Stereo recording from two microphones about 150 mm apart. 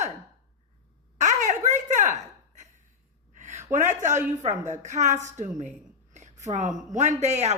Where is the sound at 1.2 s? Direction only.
55° right (ahead or behind).